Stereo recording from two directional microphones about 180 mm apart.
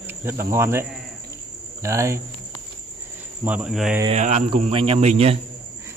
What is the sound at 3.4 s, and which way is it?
Cricket, 5° right (ahead or behind).